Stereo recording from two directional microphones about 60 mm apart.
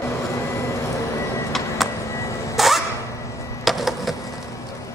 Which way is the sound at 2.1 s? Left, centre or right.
Left.